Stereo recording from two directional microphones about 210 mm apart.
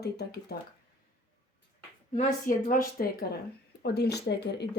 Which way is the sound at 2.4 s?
40° left (ahead or behind).